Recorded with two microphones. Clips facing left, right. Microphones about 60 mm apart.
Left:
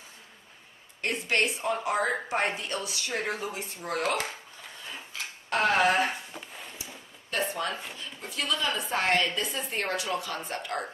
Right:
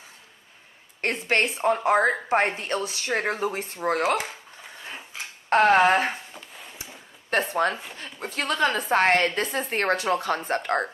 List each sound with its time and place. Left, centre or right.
1.1 s speech: right
5.5 s speech: right
6.3 s a sound: centre
7.3 s a woman's voice: right